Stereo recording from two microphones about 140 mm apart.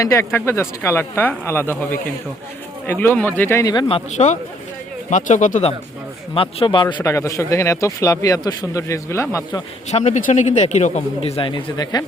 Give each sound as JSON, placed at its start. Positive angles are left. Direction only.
{"t": 0.0, "sound": "speech", "side_deg": 20}
{"t": 3.8, "sound": "speech", "side_deg": 45}
{"t": 5.1, "sound": "a man's voice", "side_deg": 60}
{"t": 6.3, "sound": "speech", "side_deg": 40}
{"t": 7.0, "sound": "speech", "side_deg": 20}
{"t": 9.9, "sound": "a man's voice", "side_deg": 60}